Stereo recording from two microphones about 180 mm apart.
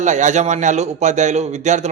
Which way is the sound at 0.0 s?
40° right (ahead or behind).